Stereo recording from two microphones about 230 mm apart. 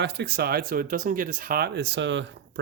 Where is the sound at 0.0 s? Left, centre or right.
Right.